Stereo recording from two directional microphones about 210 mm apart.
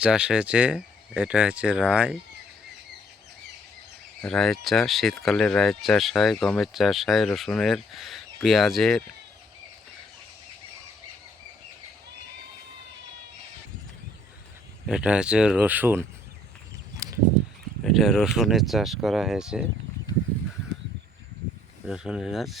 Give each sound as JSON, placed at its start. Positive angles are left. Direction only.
{"t": 0.0, "sound": "speech", "side_deg": -5}
{"t": 4.2, "sound": "speech", "side_deg": 5}
{"t": 14.8, "sound": "speech", "side_deg": -5}
{"t": 17.0, "sound": "a sound", "side_deg": -15}
{"t": 17.8, "sound": "speech", "side_deg": 0}
{"t": 21.8, "sound": "speech", "side_deg": 0}